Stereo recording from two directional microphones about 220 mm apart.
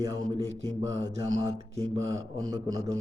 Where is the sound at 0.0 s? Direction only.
15° right (ahead or behind).